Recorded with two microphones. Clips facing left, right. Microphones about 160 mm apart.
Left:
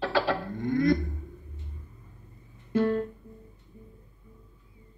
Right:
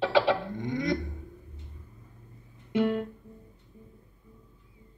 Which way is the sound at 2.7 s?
20° right (ahead or behind).